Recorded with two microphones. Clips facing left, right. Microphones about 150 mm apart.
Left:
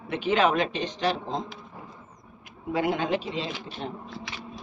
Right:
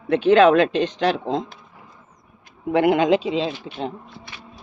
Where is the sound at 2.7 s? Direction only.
65° right (ahead or behind); by 3.4 s 90° right.